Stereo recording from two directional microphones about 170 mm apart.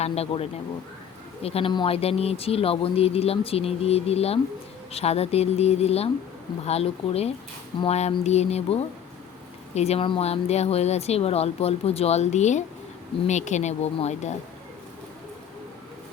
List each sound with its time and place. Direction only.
0.0 s speech: 35° left (ahead or behind)